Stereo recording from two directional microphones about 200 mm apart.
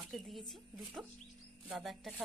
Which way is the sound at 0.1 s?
Centre (ahead or behind).